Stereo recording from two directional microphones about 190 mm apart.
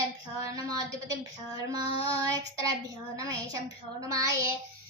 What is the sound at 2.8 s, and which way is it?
Child singing, 15° right (ahead or behind).